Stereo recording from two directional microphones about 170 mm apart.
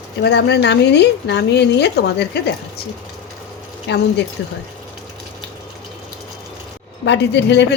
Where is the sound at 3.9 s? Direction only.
90° left.